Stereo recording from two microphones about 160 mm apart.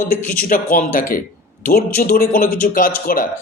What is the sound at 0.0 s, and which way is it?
A man's voice, 60° left (ahead or behind).